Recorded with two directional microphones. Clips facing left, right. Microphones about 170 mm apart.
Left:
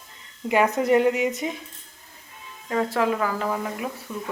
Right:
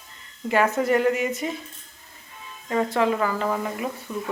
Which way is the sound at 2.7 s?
Centre (ahead or behind).